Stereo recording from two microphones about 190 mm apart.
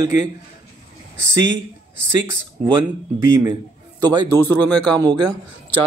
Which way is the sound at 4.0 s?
20° right (ahead or behind).